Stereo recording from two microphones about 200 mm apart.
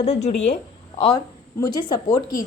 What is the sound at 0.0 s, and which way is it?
A woman's voice, 35° left (ahead or behind).